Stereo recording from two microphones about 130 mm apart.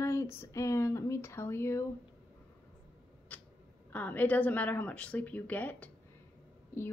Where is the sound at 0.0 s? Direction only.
20° left (ahead or behind).